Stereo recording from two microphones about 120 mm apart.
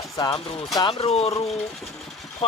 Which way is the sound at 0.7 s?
45° left (ahead or behind).